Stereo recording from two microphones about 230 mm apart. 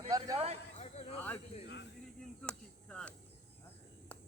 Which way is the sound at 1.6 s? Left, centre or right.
Left.